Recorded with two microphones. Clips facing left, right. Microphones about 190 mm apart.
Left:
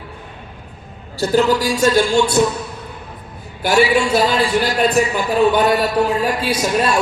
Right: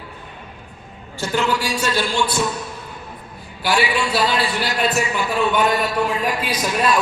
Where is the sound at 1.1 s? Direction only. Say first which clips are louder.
Left 6 dB; 35° left (ahead or behind).